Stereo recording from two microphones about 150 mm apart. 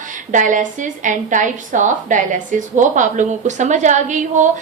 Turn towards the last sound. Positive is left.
turn(degrees=-55)  # may be behind; listen again after turning